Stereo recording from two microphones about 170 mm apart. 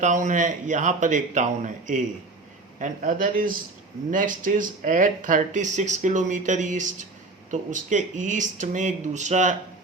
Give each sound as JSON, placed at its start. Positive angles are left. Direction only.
{"t": 0.0, "sound": "speech", "side_deg": -45}